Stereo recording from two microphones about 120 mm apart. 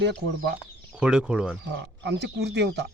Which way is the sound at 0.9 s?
5° right (ahead or behind).